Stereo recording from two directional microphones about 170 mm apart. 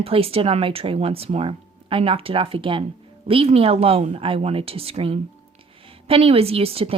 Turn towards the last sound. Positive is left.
turn(degrees=-35)  # may be behind; listen again after turning